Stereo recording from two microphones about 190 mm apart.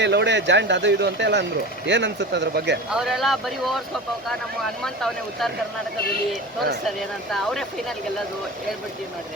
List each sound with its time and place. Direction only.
0.0 s speech: 65° right (ahead or behind)
2.9 s speech: centre (ahead or behind)
6.8 s speech: centre (ahead or behind)